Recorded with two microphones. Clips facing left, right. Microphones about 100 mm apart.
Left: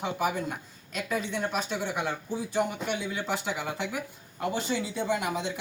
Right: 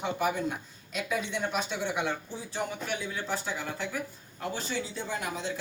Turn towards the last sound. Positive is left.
turn(degrees=15)  # may be behind; listen again after turning